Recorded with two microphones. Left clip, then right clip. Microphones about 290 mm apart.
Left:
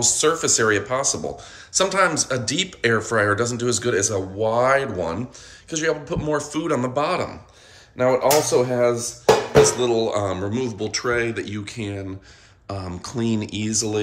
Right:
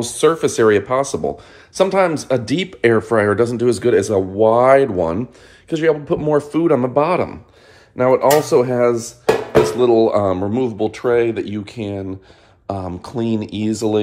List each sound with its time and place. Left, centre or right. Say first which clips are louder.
0.0 s speech: right 4 dB; centre